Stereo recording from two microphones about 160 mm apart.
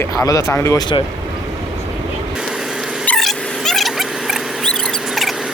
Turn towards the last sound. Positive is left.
turn(degrees=0)  # may be behind; listen again after turning